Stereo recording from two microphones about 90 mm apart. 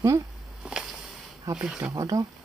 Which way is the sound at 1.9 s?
40° right (ahead or behind).